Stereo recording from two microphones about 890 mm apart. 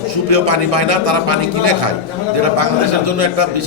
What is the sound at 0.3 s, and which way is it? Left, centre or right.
A man's voice, right.